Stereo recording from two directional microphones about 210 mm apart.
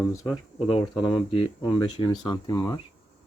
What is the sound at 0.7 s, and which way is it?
Speech, 25° left (ahead or behind).